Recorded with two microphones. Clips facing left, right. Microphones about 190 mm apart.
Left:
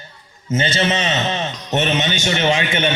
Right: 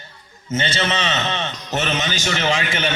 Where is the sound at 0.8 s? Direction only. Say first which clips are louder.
Left 3 dB; 35° left (ahead or behind).